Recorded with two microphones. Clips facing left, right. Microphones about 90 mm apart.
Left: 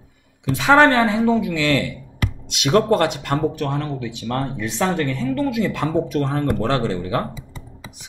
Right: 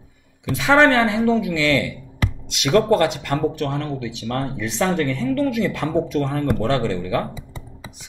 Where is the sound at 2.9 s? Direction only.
45° left (ahead or behind).